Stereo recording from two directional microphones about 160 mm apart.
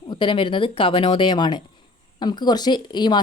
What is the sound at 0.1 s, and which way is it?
Speech, 30° left (ahead or behind).